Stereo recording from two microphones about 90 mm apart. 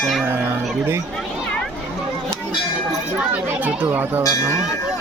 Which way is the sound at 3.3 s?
20° right (ahead or behind).